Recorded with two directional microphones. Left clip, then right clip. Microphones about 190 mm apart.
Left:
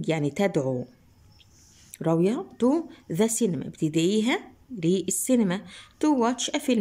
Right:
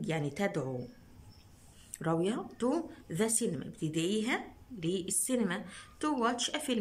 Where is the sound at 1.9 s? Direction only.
20° left (ahead or behind).